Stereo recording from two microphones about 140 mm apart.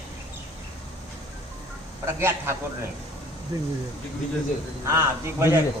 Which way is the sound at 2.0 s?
15° right (ahead or behind).